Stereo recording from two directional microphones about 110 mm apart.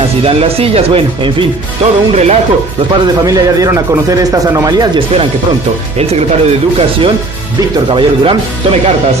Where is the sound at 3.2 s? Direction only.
35° right (ahead or behind).